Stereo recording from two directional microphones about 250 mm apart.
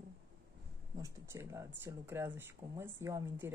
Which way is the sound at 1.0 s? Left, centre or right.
Centre.